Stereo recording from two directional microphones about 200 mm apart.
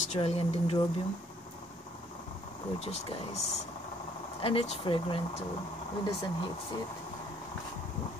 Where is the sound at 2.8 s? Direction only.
30° left (ahead or behind).